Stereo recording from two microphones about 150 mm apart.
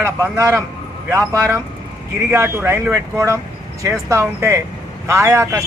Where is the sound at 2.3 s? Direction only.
15° right (ahead or behind).